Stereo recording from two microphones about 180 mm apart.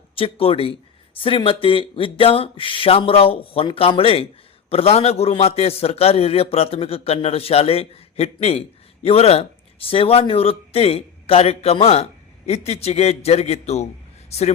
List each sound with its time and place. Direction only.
0.2 s speech: 30° left (ahead or behind)